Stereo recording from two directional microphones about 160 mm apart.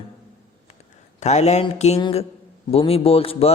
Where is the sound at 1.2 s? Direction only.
45° left (ahead or behind).